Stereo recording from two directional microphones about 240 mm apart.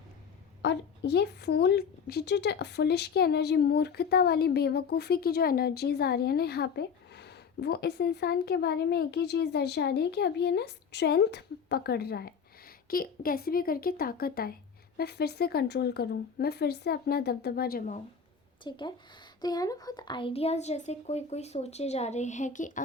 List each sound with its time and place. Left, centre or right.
0.6 s speech: left
18.6 s a woman's voice: centre